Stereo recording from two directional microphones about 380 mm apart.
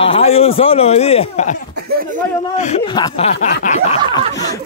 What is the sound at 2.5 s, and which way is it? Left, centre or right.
Speech, centre.